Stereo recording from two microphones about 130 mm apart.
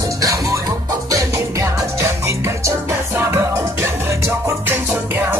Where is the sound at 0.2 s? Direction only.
25° right (ahead or behind).